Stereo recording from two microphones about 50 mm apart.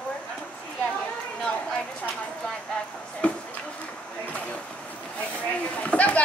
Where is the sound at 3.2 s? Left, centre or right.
Left.